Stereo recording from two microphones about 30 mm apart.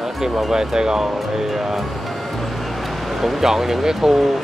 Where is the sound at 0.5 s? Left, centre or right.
Right.